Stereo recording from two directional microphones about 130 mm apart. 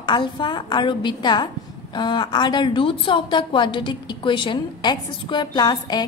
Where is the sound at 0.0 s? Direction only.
35° left (ahead or behind).